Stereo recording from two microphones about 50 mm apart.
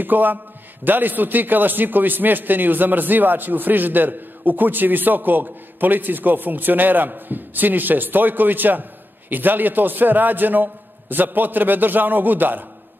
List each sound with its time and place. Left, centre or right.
0.0 s a man's voice: right